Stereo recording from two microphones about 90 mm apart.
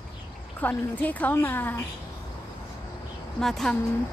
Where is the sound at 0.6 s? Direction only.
20° left (ahead or behind).